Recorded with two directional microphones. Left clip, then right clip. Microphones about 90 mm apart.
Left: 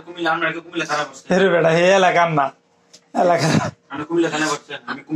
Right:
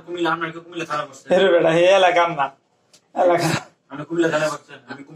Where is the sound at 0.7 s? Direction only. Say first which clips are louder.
Left 4 dB; 30° left (ahead or behind).